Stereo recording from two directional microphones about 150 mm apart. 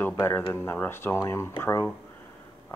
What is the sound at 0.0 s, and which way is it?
Speech, 15° left (ahead or behind).